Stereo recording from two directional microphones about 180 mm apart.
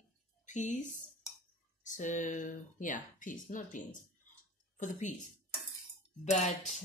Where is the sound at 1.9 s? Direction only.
45° left (ahead or behind).